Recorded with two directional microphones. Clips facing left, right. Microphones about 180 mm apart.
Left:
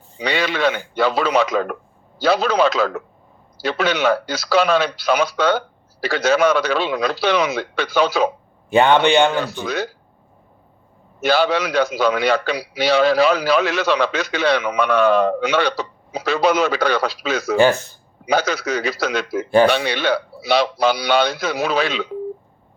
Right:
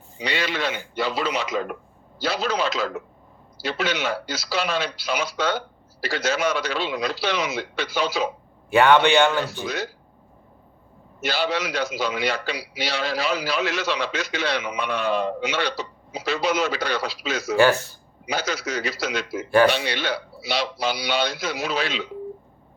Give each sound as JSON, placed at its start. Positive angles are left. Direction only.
{"t": 0.2, "sound": "a man's voice", "side_deg": 60}
{"t": 8.7, "sound": "speech", "side_deg": 20}
{"t": 11.2, "sound": "a man's voice", "side_deg": 60}